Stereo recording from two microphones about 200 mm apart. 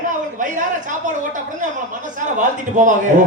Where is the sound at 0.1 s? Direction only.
40° right (ahead or behind).